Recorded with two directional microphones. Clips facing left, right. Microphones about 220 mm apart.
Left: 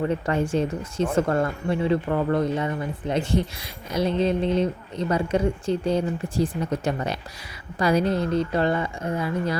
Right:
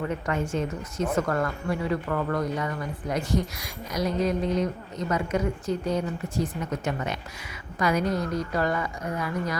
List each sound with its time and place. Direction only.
0.1 s speech: 30° left (ahead or behind)